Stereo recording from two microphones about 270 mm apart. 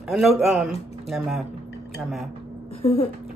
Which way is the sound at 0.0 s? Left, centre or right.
Centre.